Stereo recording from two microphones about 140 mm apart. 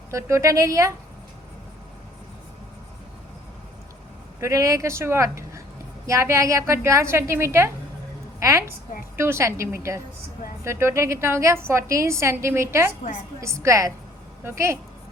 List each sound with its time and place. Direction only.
0.1 s a woman's voice: 20° right (ahead or behind)
4.4 s a man's voice: 20° right (ahead or behind)